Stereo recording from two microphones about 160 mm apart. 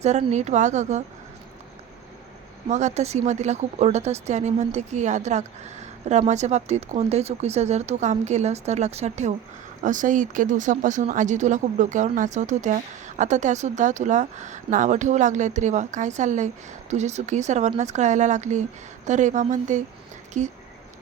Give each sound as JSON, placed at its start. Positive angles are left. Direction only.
{"t": 0.0, "sound": "speech", "side_deg": -45}
{"t": 2.6, "sound": "speech", "side_deg": -45}